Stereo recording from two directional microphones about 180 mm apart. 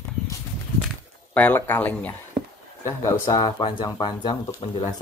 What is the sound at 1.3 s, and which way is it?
Speech, 10° left (ahead or behind).